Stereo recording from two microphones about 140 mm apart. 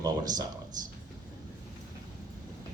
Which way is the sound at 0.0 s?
25° right (ahead or behind).